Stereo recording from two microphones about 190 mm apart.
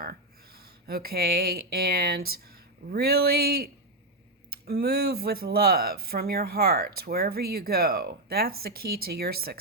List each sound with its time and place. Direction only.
0.0 s speech: 55° right (ahead or behind)